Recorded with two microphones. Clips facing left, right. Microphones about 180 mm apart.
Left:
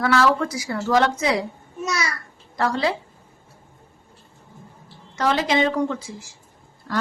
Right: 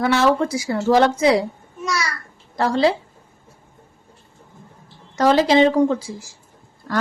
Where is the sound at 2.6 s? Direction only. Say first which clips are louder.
Right 5 dB; 30° right (ahead or behind).